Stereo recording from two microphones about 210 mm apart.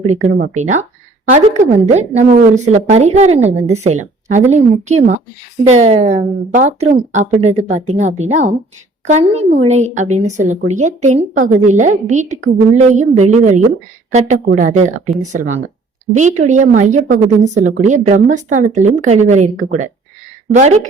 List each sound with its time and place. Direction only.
0.1 s a woman's voice: 35° right (ahead or behind)